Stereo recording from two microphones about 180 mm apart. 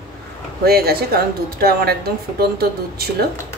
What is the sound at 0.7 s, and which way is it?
Speech, 60° right (ahead or behind).